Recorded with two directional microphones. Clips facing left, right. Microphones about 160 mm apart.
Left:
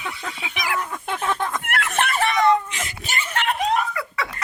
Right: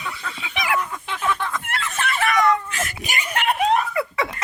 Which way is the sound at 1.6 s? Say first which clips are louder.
Left 3 dB; 65° left (ahead or behind).